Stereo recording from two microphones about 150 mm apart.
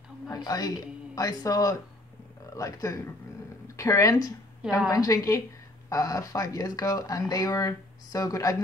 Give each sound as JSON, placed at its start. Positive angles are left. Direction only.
{"t": 0.3, "sound": "a woman's voice", "side_deg": 25}